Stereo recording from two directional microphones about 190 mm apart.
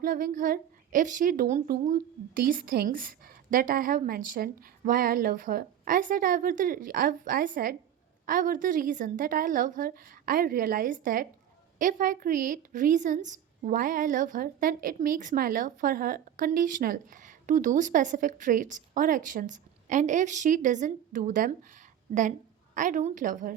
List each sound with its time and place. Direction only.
0.0 s a woman's voice: 45° right (ahead or behind)